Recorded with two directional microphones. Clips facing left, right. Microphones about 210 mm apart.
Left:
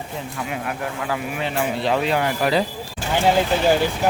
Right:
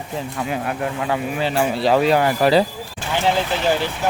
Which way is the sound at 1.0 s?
30° right (ahead or behind).